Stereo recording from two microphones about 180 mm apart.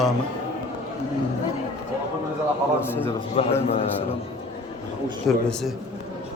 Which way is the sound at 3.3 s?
35° left (ahead or behind).